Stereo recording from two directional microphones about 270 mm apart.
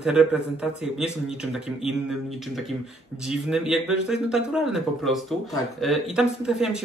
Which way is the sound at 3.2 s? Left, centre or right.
Centre.